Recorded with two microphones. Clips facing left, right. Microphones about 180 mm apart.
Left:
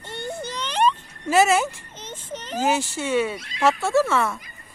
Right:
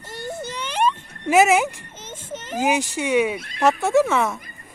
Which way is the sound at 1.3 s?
15° right (ahead or behind).